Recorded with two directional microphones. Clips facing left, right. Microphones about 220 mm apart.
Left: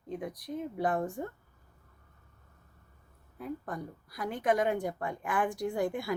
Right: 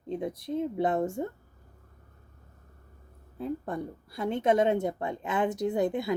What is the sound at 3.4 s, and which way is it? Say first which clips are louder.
A woman's voice: right 5 dB; 25° right (ahead or behind).